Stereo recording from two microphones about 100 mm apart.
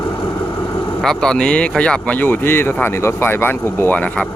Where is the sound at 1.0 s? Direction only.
5° left (ahead or behind).